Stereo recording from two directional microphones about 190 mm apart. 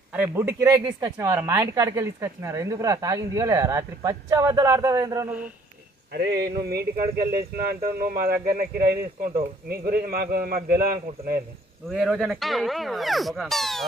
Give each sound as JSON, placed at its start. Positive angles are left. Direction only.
{"t": 0.1, "sound": "speech", "side_deg": -10}
{"t": 6.1, "sound": "speech", "side_deg": -60}
{"t": 11.9, "sound": "speech", "side_deg": 0}